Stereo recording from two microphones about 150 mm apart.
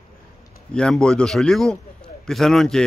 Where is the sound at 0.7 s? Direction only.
5° left (ahead or behind).